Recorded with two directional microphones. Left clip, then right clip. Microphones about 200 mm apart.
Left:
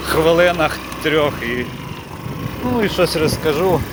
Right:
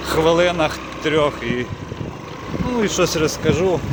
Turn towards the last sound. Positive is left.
turn(degrees=-5)  # may be behind; listen again after turning